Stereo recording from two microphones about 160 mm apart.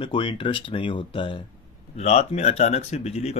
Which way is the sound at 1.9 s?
45° left (ahead or behind).